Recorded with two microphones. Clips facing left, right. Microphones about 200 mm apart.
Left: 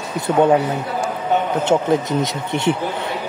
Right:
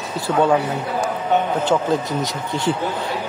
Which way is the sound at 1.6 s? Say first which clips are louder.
Left 2 dB; 20° left (ahead or behind).